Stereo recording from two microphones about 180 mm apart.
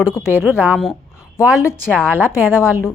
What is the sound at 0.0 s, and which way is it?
Speech, 15° left (ahead or behind).